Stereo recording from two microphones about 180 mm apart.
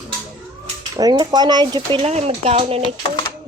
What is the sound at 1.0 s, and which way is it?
Speech, 20° right (ahead or behind).